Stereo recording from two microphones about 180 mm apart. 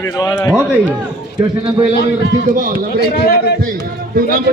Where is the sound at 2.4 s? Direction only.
50° right (ahead or behind).